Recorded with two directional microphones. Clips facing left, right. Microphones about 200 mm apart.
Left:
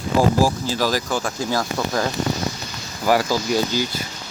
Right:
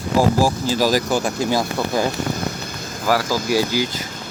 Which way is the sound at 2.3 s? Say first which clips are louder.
Right 1 dB; 55° right (ahead or behind).